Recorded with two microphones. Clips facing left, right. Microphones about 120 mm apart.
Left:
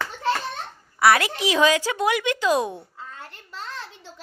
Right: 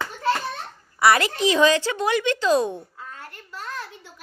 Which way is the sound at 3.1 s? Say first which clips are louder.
Right 1 dB; 25° left (ahead or behind).